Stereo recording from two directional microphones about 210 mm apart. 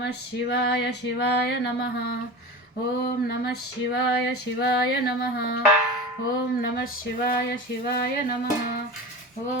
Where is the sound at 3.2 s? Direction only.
50° left (ahead or behind).